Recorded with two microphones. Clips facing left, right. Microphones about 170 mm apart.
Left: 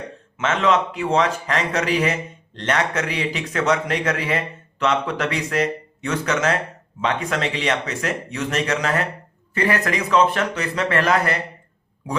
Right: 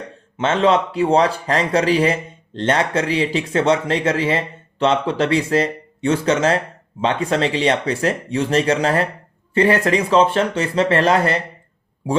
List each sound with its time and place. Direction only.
0.3 s speech: 30° right (ahead or behind)